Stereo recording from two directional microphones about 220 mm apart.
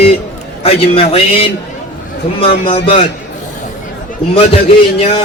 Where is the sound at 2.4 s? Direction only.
25° left (ahead or behind).